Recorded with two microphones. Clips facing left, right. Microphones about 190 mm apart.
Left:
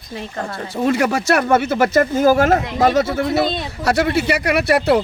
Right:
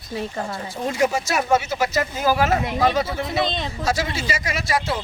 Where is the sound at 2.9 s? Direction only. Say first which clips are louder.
Left 6 dB; 60° left (ahead or behind).